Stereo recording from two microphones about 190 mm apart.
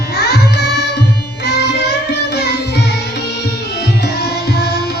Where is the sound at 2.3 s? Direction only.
60° left (ahead or behind).